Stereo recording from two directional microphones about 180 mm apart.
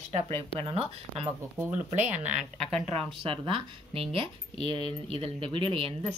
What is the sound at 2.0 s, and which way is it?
Speech, 10° right (ahead or behind).